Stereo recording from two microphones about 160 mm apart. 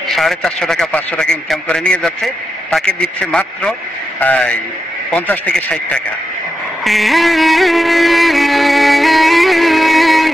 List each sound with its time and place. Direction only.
0.1 s a man's voice: centre (ahead or behind)
6.8 s music: centre (ahead or behind)